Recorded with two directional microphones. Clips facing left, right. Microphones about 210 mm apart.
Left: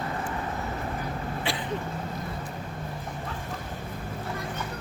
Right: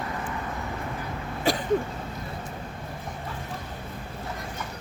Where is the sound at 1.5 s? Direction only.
40° right (ahead or behind).